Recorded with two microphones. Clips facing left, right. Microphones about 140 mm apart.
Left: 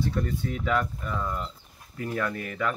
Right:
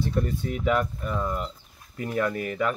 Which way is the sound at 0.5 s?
15° right (ahead or behind).